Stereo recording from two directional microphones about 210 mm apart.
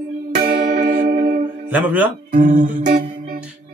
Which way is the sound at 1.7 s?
5° right (ahead or behind).